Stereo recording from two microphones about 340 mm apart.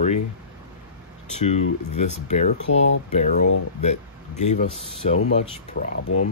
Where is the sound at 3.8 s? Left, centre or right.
Centre.